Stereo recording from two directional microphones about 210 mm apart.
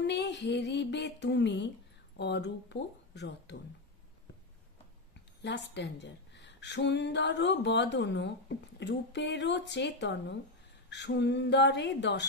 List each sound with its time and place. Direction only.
0.0 s speech: 55° left (ahead or behind)
5.4 s speech: 55° left (ahead or behind)